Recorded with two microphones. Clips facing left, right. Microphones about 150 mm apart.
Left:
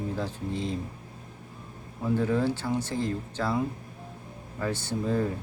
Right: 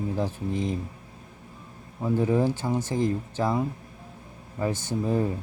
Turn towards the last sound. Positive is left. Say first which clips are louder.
# right 2 dB
turn(degrees=-15)  # may be behind; listen again after turning